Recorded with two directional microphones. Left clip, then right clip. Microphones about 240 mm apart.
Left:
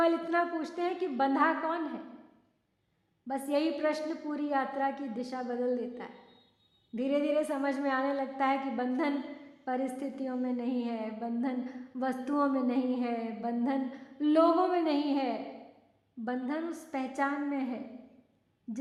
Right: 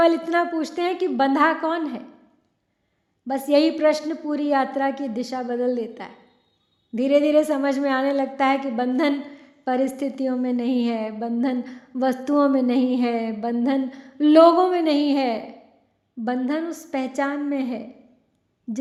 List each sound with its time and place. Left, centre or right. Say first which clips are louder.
0.0 s a woman's voice: right 9 dB; right
3.2 s a woman's voice: right 12 dB; right